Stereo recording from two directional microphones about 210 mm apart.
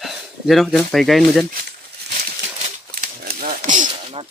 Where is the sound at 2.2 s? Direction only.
40° right (ahead or behind).